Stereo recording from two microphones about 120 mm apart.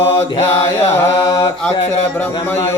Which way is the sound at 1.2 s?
30° left (ahead or behind).